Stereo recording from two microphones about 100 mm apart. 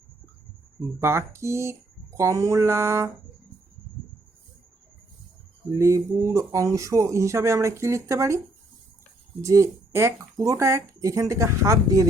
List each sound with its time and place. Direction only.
1.0 s a sound: 25° right (ahead or behind)
5.7 s speech: 30° right (ahead or behind)
9.4 s speech: 30° right (ahead or behind)